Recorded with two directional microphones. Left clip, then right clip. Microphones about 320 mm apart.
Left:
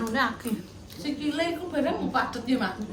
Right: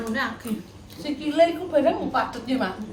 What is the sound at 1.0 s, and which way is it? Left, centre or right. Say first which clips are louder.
A woman's voice: right 8 dB; centre.